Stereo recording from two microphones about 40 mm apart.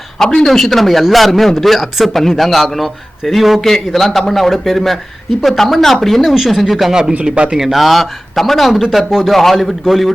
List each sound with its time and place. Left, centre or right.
0.2 s a man's voice: centre
7.3 s speech: right
7.5 s a man's voice: centre
9.3 s a man's voice: centre